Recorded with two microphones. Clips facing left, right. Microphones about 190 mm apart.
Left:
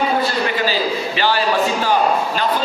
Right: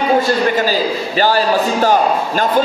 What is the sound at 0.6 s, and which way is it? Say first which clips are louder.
A man's voice: right 3 dB; 45° right (ahead or behind).